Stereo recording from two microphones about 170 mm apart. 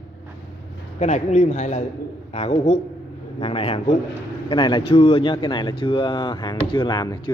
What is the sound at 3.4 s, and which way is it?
Speech, 35° left (ahead or behind).